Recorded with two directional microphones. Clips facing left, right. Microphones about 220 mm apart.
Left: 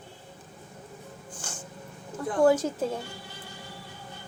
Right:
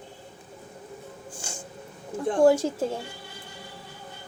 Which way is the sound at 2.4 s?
10° right (ahead or behind).